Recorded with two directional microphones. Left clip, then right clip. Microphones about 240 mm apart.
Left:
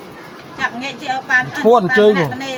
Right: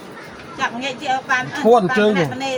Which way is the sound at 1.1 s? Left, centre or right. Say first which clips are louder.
Left 3 dB; centre.